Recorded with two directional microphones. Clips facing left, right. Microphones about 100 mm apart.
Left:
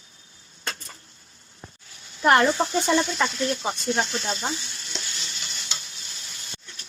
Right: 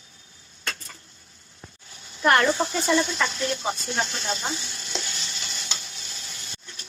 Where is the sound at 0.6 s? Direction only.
30° left (ahead or behind).